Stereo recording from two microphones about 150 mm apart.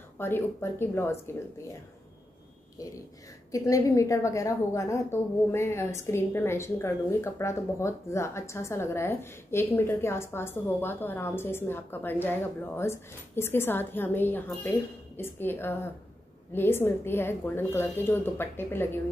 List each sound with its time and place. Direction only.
0.2 s a woman's voice: 15° left (ahead or behind)
2.8 s a woman's voice: 25° left (ahead or behind)